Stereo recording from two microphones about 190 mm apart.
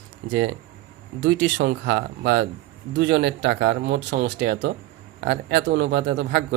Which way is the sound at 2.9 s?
75° right (ahead or behind).